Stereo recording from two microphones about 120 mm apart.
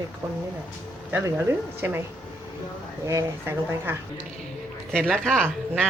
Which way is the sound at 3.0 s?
20° right (ahead or behind).